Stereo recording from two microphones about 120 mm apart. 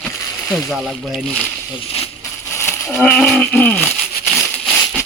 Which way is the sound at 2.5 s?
20° left (ahead or behind).